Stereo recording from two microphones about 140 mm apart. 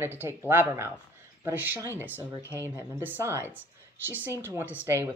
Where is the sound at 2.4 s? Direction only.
20° left (ahead or behind).